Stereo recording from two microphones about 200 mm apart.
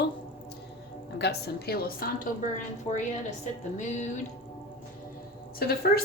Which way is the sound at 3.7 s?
35° left (ahead or behind).